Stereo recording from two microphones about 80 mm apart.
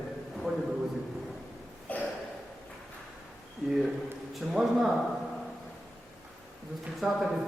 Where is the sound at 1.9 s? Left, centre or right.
Centre.